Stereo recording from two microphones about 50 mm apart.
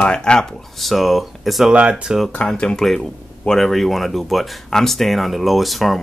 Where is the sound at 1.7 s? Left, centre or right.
Right.